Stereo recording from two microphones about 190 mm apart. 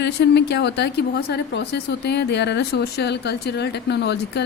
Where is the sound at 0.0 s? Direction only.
65° left (ahead or behind).